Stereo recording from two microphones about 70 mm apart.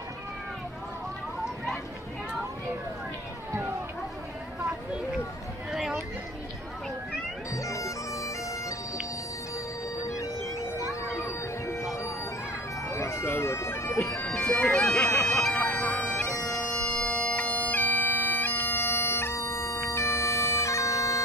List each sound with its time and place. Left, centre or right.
5.7 s a sound: centre
7.5 s bagpipes: left
10.0 s music: left
11.1 s a sound: left
12.8 s bagpipes: left
14.2 s bagpipes: centre
14.7 s bagpipes: centre
15.0 s bagpipes: left
15.5 s bagpipes: left
16.3 s bagpipes: left
16.7 s bagpipes: centre; by 21.2 s left